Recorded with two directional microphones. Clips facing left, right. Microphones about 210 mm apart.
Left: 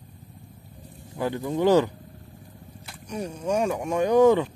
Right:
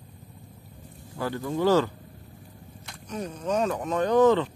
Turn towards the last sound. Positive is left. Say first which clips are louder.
# left 2 dB
turn(degrees=10)  # may be behind; listen again after turning